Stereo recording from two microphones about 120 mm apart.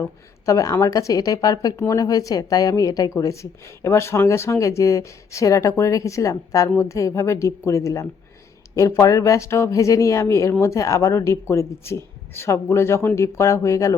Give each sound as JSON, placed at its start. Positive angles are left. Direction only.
{"t": 0.0, "sound": "a woman's voice", "side_deg": 25}